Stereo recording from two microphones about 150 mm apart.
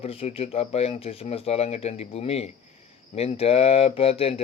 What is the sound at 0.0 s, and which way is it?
Speech, 40° left (ahead or behind).